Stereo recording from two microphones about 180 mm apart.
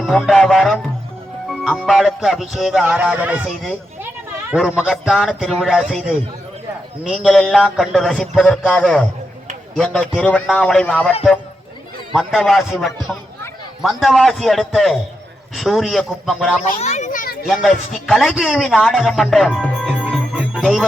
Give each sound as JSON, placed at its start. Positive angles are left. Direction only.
{"t": 0.0, "sound": "a man's voice", "side_deg": 0}
{"t": 1.5, "sound": "music", "side_deg": 5}
{"t": 1.9, "sound": "a man's voice", "side_deg": 0}
{"t": 12.1, "sound": "a man's voice", "side_deg": 0}
{"t": 16.6, "sound": "a child's voice", "side_deg": 45}
{"t": 17.4, "sound": "a man's voice", "side_deg": 0}
{"t": 20.5, "sound": "music", "side_deg": -5}